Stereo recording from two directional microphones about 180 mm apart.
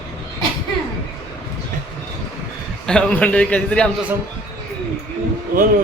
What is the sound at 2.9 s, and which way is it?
A man's voice, 5° left (ahead or behind).